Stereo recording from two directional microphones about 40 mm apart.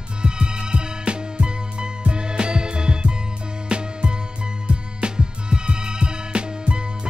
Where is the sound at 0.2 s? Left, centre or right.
Right.